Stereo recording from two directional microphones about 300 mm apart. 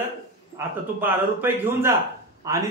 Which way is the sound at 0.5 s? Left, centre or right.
Centre.